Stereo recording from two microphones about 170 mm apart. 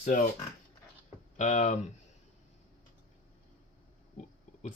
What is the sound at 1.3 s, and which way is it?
Speech, 45° left (ahead or behind).